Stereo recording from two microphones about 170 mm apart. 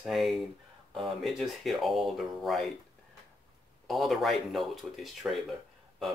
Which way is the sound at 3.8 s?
Centre (ahead or behind).